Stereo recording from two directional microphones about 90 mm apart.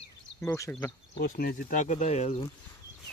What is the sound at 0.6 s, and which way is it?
Speech, 30° left (ahead or behind).